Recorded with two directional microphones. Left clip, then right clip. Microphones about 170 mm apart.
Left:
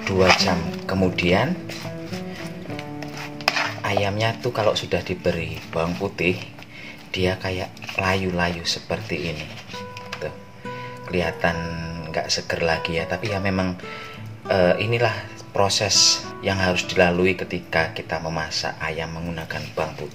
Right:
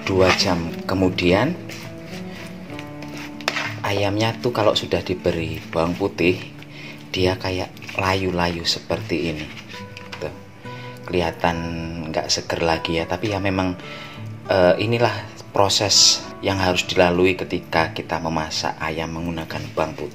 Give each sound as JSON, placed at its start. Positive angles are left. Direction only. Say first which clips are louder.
{"t": 0.4, "sound": "speech", "louder": "right 1 dB", "side_deg": -35}
{"t": 3.8, "sound": "speech", "louder": "right 4 dB", "side_deg": -35}
{"t": 11.1, "sound": "speech", "louder": "right 2 dB", "side_deg": -35}